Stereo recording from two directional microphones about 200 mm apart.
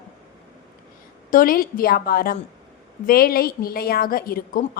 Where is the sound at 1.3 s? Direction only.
45° left (ahead or behind).